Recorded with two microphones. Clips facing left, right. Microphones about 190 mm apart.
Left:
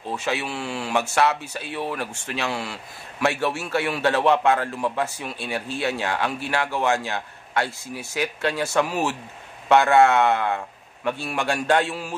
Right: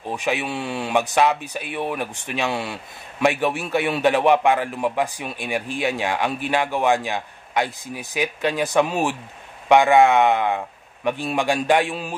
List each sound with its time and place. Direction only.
0.1 s speech: 15° right (ahead or behind)